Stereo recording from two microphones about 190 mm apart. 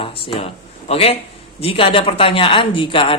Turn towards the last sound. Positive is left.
turn(degrees=25)  # may be behind; listen again after turning